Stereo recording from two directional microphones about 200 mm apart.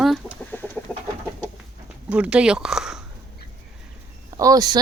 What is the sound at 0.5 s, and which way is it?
Chicken, 10° left (ahead or behind).